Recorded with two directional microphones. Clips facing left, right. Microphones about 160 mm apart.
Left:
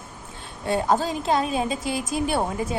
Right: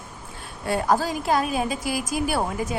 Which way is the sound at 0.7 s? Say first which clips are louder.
Even; 25° left (ahead or behind).